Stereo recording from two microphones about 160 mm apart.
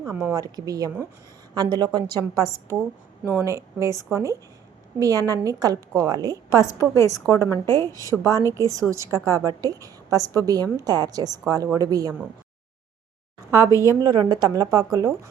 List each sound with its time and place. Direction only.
0.2 s a woman's voice: 20° right (ahead or behind)
6.3 s a woman's voice: 20° left (ahead or behind)
8.5 s a woman's voice: 20° right (ahead or behind)
13.5 s a woman's voice: 20° left (ahead or behind)
14.0 s a woman's voice: 25° right (ahead or behind)